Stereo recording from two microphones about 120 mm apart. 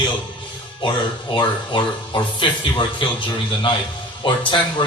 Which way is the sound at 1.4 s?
40° left (ahead or behind).